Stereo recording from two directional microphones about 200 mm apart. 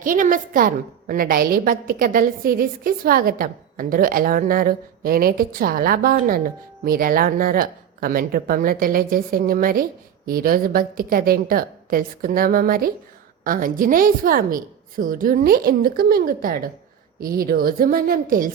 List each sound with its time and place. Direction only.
0.0 s a woman's voice: 45° right (ahead or behind)